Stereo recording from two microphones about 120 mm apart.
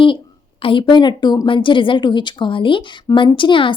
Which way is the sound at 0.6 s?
45° left (ahead or behind).